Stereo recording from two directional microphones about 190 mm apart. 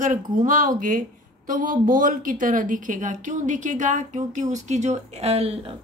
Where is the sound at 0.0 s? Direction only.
45° right (ahead or behind).